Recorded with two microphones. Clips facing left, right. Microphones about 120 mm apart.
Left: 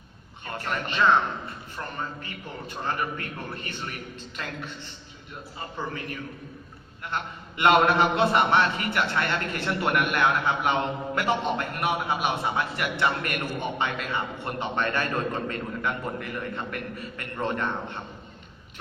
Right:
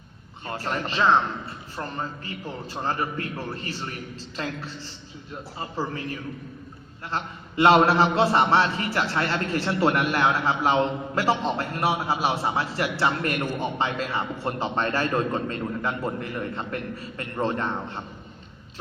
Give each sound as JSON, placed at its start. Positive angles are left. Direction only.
{"t": 0.4, "sound": "a man's voice", "side_deg": -30}